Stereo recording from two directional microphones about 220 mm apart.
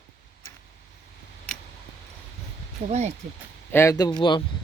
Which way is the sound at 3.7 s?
10° left (ahead or behind).